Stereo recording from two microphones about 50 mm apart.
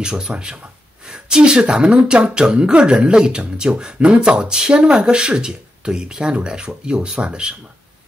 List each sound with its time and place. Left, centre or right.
0.0 s speech: centre